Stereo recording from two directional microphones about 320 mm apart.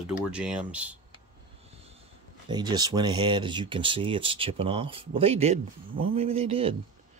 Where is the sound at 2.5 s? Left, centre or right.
Centre.